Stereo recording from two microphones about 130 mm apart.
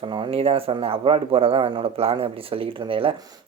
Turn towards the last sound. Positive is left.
turn(degrees=-45)  # may be behind; listen again after turning